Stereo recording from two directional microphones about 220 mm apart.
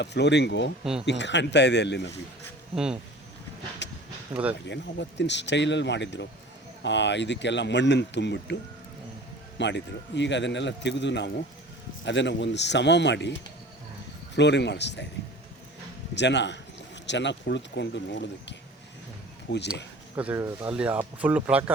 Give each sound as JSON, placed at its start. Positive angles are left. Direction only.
{"t": 0.0, "sound": "a man's voice", "side_deg": 50}
{"t": 2.7, "sound": "speech", "side_deg": -5}
{"t": 3.8, "sound": "a sound", "side_deg": 55}
{"t": 4.6, "sound": "a man's voice", "side_deg": 55}
{"t": 9.6, "sound": "a man's voice", "side_deg": 55}
{"t": 16.1, "sound": "a man's voice", "side_deg": 50}
{"t": 20.1, "sound": "speech", "side_deg": -10}